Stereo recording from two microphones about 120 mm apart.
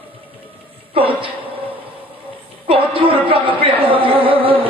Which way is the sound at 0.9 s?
45° right (ahead or behind).